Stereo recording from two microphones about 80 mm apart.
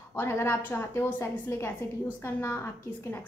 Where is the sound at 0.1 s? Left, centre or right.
Left.